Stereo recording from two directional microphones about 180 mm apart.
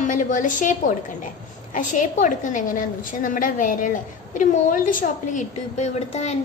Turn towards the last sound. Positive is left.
turn(degrees=40)  # may be behind; listen again after turning